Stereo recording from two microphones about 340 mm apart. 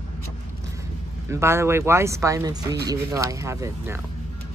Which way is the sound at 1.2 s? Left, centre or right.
Centre.